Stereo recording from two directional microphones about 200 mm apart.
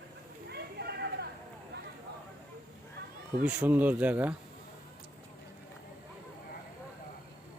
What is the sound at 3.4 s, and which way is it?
Speech, 5° right (ahead or behind).